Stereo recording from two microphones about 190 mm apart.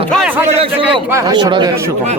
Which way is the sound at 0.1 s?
5° right (ahead or behind).